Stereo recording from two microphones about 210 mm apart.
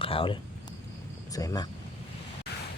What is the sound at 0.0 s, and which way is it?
Speech, 25° left (ahead or behind).